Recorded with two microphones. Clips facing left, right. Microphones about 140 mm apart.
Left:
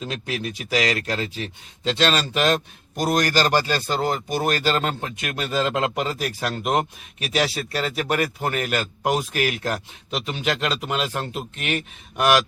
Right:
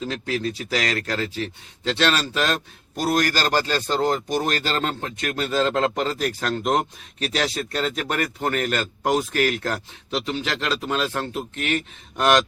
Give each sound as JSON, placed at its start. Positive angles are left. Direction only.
{"t": 0.0, "sound": "a man's voice", "side_deg": 15}
{"t": 12.2, "sound": "a man's voice", "side_deg": 5}